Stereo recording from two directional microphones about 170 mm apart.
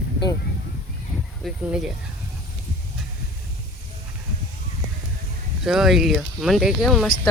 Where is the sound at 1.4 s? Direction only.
5° right (ahead or behind).